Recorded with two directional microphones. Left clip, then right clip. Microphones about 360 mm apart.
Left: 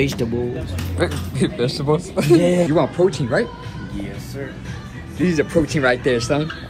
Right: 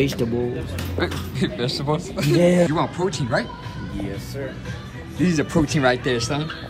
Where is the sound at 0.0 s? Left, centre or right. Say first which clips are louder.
Left 1 dB; centre.